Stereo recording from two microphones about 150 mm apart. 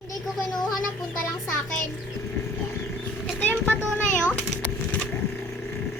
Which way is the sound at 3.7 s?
15° left (ahead or behind).